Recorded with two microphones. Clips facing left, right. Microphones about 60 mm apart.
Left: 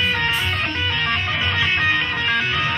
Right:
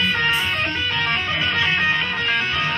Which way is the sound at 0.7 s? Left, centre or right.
Left.